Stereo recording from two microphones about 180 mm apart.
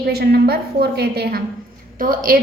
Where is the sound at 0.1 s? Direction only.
60° right (ahead or behind).